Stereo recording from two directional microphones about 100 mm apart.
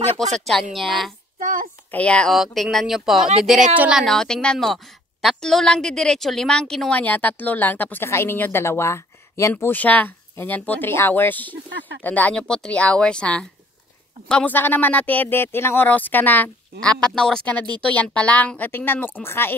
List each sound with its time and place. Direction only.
0.5 s speech: centre (ahead or behind)
1.9 s a woman's voice: 10° left (ahead or behind)
2.3 s a woman's voice: centre (ahead or behind); by 16.9 s 20° left (ahead or behind)
16.9 s a woman's voice: 5° left (ahead or behind); by 19.5 s 25° left (ahead or behind)